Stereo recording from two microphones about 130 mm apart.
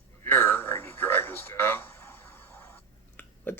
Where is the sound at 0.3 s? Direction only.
15° left (ahead or behind).